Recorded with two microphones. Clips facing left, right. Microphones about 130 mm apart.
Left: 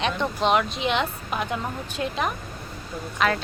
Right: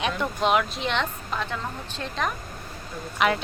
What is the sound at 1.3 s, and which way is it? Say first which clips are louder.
A woman's voice: left 2 dB; 15° left (ahead or behind).